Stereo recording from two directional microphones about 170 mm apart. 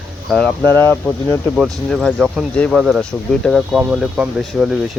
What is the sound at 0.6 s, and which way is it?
Speech, 15° left (ahead or behind).